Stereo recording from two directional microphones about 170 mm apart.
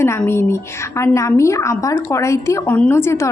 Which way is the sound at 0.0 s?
15° left (ahead or behind).